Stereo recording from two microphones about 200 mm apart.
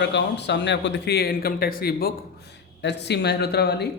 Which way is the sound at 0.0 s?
60° left (ahead or behind).